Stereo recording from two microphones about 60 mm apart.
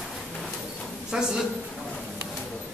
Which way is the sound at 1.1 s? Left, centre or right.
Centre.